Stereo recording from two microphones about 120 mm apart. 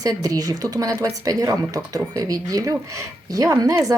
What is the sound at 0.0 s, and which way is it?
Speech, 30° right (ahead or behind).